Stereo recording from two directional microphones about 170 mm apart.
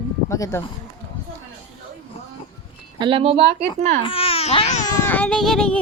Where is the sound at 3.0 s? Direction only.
30° right (ahead or behind).